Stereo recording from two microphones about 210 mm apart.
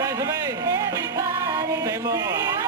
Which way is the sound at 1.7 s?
15° right (ahead or behind).